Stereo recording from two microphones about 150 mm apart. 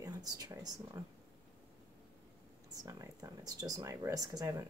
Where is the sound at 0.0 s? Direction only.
25° right (ahead or behind).